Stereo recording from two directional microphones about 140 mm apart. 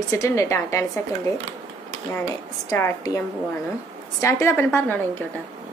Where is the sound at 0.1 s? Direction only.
20° left (ahead or behind).